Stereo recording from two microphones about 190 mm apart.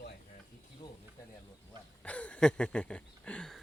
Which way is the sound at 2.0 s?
5° left (ahead or behind).